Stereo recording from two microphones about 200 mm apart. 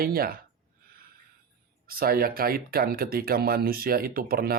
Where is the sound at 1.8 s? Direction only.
45° right (ahead or behind).